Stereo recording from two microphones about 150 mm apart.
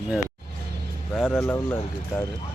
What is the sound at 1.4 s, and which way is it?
Speech, 15° left (ahead or behind).